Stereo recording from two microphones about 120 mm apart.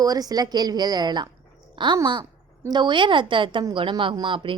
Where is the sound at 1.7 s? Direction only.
40° right (ahead or behind).